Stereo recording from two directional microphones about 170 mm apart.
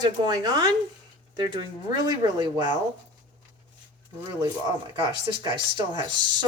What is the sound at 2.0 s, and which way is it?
Speech, 25° right (ahead or behind).